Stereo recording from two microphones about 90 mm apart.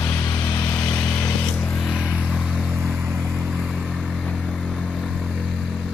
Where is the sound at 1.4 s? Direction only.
15° left (ahead or behind).